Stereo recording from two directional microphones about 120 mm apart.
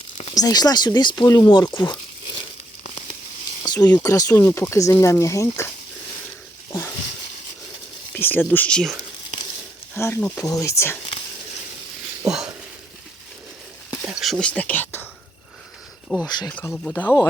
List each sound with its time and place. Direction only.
0.3 s speech: 30° left (ahead or behind)
2.8 s a sound: 60° left (ahead or behind)
3.6 s a sound: 35° left (ahead or behind)
4.0 s speech: 25° left (ahead or behind)
6.7 s a sound: 25° left (ahead or behind)
8.1 s speech: 15° left (ahead or behind)
9.9 s speech: 15° left (ahead or behind)
14.0 s speech: 5° right (ahead or behind); by 15.0 s 15° left (ahead or behind)
16.0 s speech: 5° left (ahead or behind)
16.5 s speech: 15° left (ahead or behind)